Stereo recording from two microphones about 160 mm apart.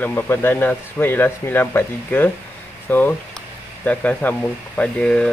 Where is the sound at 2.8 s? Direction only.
10° left (ahead or behind).